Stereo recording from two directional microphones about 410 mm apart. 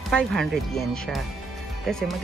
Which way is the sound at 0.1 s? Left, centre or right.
Centre.